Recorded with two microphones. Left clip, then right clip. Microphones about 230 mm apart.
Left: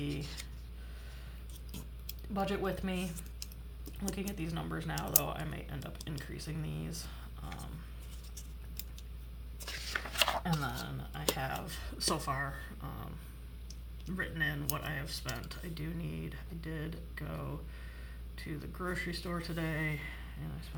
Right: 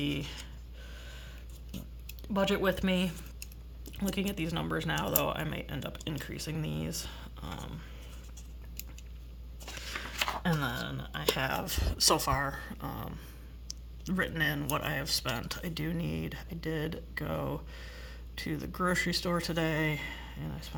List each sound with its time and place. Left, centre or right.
0.0 s speech: right
2.3 s speech: right
10.4 s speech: right